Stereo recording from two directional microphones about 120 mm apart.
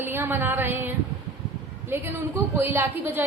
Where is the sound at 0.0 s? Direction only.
20° right (ahead or behind).